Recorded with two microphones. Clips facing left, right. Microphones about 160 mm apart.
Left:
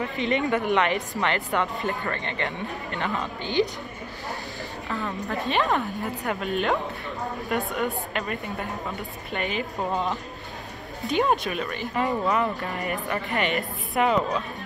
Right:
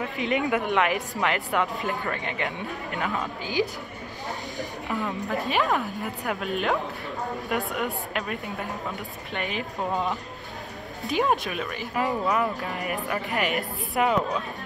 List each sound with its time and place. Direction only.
0.0 s a woman's voice: 5° right (ahead or behind)
4.6 s music: 15° right (ahead or behind)
5.0 s a woman's voice: centre (ahead or behind)